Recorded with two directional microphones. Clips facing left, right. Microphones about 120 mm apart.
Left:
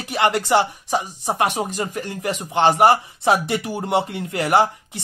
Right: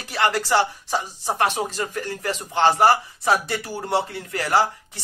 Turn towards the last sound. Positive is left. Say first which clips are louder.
# left 3 dB
turn(degrees=20)  # may be behind; listen again after turning